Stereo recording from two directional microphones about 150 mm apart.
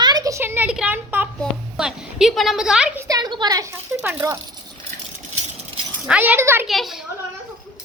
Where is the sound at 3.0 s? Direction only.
25° right (ahead or behind).